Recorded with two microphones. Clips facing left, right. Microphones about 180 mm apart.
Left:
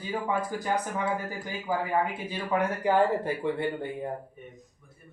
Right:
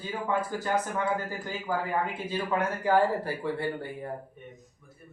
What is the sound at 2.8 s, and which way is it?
Speech, 20° left (ahead or behind).